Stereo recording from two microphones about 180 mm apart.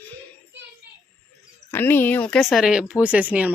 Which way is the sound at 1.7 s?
10° left (ahead or behind).